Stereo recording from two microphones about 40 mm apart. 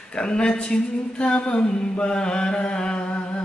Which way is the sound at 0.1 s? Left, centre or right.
Left.